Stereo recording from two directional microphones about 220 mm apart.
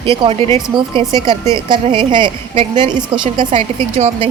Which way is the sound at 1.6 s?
20° right (ahead or behind).